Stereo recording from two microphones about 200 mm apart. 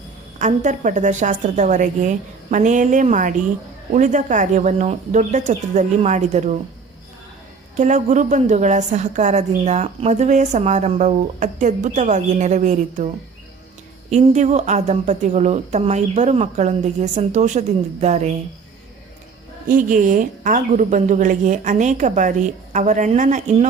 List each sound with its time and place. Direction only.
0.3 s a woman's voice: 40° right (ahead or behind)
7.8 s a woman's voice: 35° right (ahead or behind)
14.1 s a woman's voice: 35° right (ahead or behind)
19.6 s a woman's voice: 40° right (ahead or behind)